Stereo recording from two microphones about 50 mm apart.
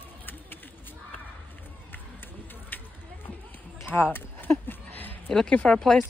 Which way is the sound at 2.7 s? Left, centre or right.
Left.